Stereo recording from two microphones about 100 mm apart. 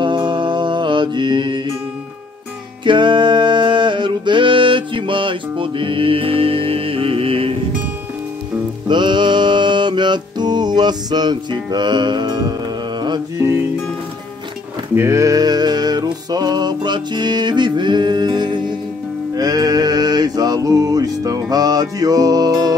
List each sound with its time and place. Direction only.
0.0 s mantra: 50° right (ahead or behind)
2.8 s music: 50° right (ahead or behind); by 7.5 s 70° right (ahead or behind)
8.8 s music: 50° right (ahead or behind)
15.0 s music: 30° right (ahead or behind)